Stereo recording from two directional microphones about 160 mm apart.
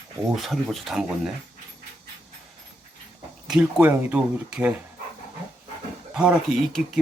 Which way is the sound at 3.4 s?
5° right (ahead or behind).